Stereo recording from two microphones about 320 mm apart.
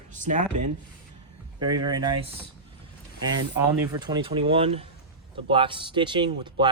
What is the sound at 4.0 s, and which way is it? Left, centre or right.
A man's voice, centre.